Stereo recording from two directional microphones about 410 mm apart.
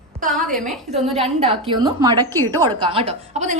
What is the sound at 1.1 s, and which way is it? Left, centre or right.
A woman's voice, centre.